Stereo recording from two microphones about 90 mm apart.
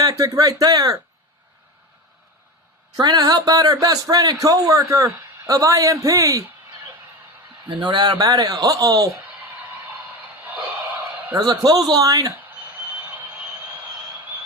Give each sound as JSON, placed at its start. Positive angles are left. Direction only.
{"t": 0.0, "sound": "speech", "side_deg": -40}
{"t": 3.0, "sound": "a man's voice", "side_deg": -45}
{"t": 7.7, "sound": "a man's voice", "side_deg": -55}
{"t": 10.4, "sound": "a sound", "side_deg": -20}
{"t": 11.3, "sound": "speech", "side_deg": -45}